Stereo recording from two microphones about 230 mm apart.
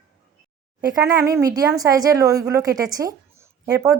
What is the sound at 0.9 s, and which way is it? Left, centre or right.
A woman's voice, centre.